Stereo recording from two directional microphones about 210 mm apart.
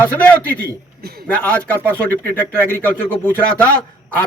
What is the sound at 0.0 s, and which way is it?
Speech, 10° left (ahead or behind).